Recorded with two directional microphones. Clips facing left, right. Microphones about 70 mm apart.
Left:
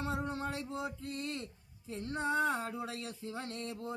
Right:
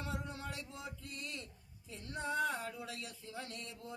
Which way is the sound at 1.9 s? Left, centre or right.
Left.